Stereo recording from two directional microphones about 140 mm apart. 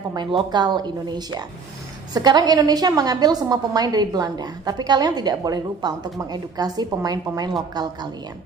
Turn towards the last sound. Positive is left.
turn(degrees=-30)  # may be behind; listen again after turning